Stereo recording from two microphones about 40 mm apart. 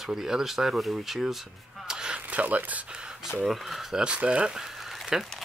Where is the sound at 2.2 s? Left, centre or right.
Right.